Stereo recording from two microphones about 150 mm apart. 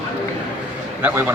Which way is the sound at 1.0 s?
15° right (ahead or behind).